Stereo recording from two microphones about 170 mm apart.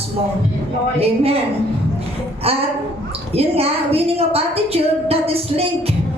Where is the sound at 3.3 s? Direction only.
35° right (ahead or behind).